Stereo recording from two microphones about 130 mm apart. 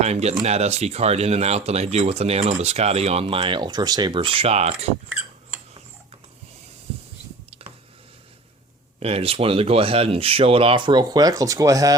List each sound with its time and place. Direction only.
0.0 s speech: 55° right (ahead or behind)
9.0 s speech: 50° right (ahead or behind); by 11.9 s 25° right (ahead or behind)